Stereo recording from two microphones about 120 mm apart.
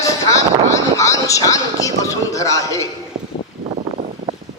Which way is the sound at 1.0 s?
25° left (ahead or behind).